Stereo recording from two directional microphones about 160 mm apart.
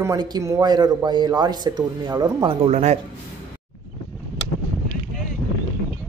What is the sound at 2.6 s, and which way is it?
Speech, 45° right (ahead or behind).